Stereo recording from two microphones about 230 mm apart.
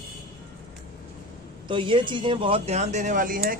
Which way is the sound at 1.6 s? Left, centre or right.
Right.